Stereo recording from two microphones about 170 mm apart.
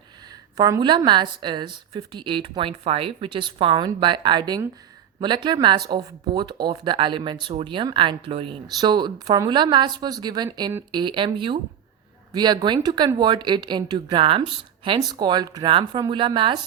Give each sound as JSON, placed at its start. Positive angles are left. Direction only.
{"t": 0.5, "sound": "speech", "side_deg": -20}